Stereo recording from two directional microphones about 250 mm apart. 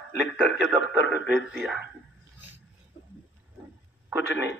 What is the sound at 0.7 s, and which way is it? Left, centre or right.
A man's voice, centre.